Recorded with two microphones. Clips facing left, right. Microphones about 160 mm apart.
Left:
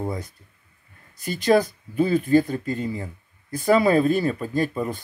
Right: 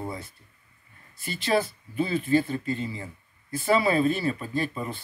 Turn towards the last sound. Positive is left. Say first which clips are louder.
# left 5 dB
turn(degrees=45)  # may be behind; listen again after turning